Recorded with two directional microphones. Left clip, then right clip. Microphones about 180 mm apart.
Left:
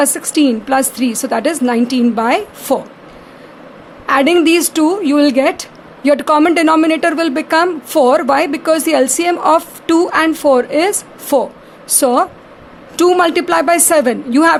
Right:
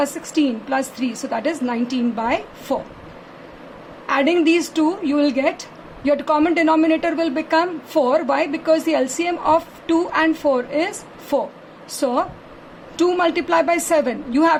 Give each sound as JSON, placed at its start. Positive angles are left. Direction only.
{"t": 0.0, "sound": "a woman's voice", "side_deg": 50}
{"t": 4.0, "sound": "a woman's voice", "side_deg": 55}